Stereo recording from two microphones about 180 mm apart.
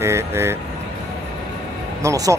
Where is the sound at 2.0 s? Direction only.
15° right (ahead or behind).